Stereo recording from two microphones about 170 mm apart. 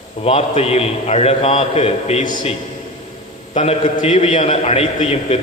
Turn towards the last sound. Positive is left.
turn(degrees=35)  # may be behind; listen again after turning